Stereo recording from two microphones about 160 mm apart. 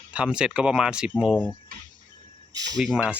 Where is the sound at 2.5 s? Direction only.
25° right (ahead or behind).